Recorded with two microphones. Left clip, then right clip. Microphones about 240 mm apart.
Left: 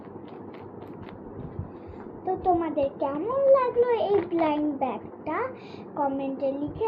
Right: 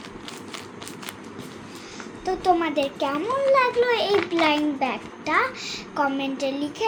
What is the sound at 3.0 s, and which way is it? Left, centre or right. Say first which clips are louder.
Speech: right 2 dB; right.